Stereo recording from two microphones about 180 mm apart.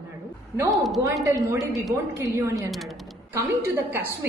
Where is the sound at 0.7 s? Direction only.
Centre (ahead or behind).